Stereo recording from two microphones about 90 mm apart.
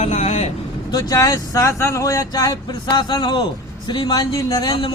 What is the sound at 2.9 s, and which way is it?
Speech, 55° left (ahead or behind).